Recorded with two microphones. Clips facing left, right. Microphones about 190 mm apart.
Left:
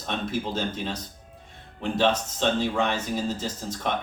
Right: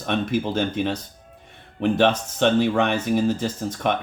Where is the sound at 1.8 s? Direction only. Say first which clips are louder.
Right 5 dB; 65° right (ahead or behind).